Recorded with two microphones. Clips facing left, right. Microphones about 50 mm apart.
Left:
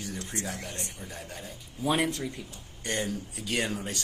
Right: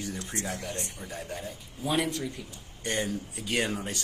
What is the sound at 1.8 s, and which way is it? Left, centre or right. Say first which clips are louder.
Speech: left 1 dB; left.